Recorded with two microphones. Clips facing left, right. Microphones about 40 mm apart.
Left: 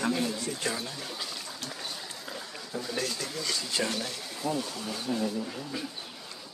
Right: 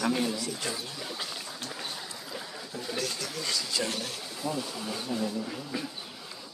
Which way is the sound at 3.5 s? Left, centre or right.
Left.